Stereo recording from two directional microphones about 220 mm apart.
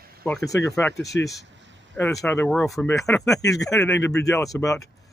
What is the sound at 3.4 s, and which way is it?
Speech, 15° left (ahead or behind).